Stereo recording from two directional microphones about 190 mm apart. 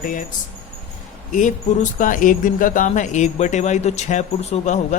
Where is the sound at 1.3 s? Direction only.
40° left (ahead or behind).